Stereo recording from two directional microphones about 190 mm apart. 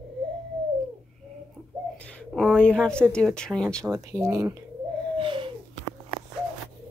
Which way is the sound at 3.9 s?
15° right (ahead or behind).